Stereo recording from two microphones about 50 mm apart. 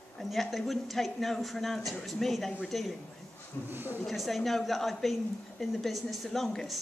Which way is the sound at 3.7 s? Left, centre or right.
Right.